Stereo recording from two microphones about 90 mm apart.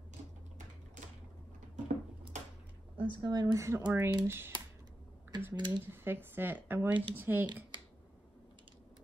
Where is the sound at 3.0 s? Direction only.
60° right (ahead or behind).